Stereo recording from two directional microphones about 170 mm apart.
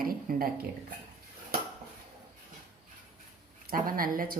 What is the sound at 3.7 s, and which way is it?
Speech, 60° right (ahead or behind).